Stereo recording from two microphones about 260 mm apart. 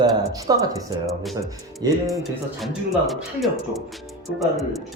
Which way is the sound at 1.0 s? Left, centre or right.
Centre.